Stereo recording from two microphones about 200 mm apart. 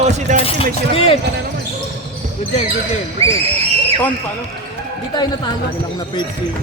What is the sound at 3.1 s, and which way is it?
Speech, 30° right (ahead or behind).